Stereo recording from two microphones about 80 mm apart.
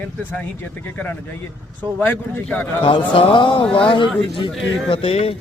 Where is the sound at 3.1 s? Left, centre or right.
Left.